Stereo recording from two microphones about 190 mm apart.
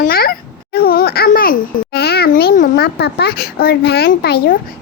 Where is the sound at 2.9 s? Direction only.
60° left (ahead or behind).